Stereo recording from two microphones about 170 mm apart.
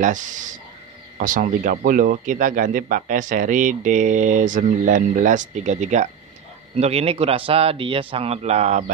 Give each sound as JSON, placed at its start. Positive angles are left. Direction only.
{"t": 0.0, "sound": "a man's voice", "side_deg": -50}